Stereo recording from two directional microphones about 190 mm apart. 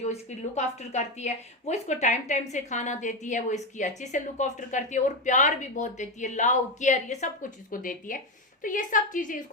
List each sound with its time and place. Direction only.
0.0 s a woman's voice: 35° left (ahead or behind)